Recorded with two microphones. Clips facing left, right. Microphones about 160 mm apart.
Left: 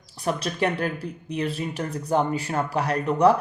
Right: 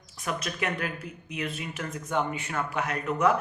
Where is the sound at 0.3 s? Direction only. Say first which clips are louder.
Left 6 dB; 30° left (ahead or behind).